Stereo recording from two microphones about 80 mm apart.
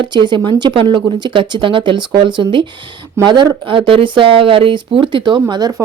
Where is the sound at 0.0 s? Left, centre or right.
Right.